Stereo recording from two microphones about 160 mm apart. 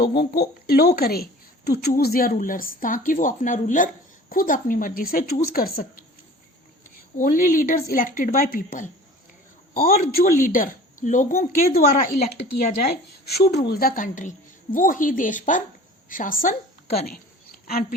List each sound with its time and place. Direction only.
0.0 s speech: 80° left
7.2 s speech: 55° left (ahead or behind)
13.2 s a woman's voice: 80° left